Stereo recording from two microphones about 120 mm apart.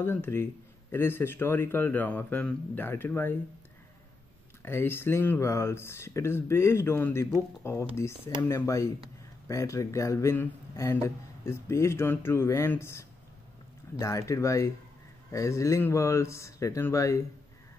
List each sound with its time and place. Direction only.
0.0 s speech: 20° left (ahead or behind)
4.6 s speech: 20° left (ahead or behind)